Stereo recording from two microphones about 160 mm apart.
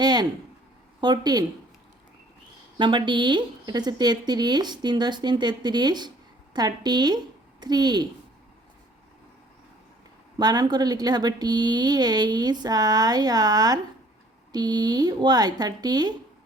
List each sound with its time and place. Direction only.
0.0 s a sound: 25° right (ahead or behind)
1.0 s speech: 25° right (ahead or behind)
2.7 s speech: 30° right (ahead or behind)
10.3 s speech: 25° right (ahead or behind)